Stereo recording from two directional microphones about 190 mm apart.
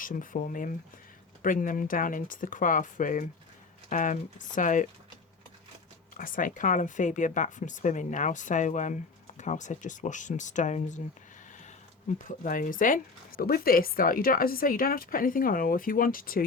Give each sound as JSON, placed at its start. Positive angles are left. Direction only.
{"t": 0.0, "sound": "speech", "side_deg": 45}
{"t": 6.1, "sound": "speech", "side_deg": 45}
{"t": 12.5, "sound": "speech", "side_deg": 45}